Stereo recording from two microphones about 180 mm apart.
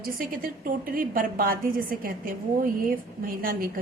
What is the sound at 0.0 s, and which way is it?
A woman's voice, 50° right (ahead or behind).